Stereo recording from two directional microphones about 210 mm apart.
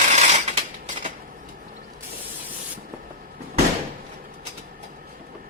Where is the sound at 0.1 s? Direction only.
35° right (ahead or behind).